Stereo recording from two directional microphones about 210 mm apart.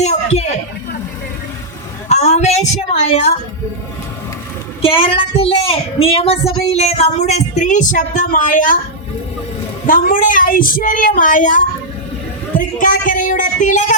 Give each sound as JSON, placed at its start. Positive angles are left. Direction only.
{"t": 0.0, "sound": "a sound", "side_deg": 30}
{"t": 2.0, "sound": "a woman's voice", "side_deg": 30}
{"t": 4.8, "sound": "a woman's voice", "side_deg": 25}
{"t": 9.8, "sound": "a woman's voice", "side_deg": 40}